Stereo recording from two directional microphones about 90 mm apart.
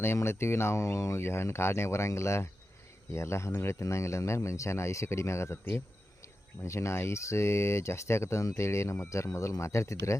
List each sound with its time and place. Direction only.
0.0 s speech: 25° left (ahead or behind)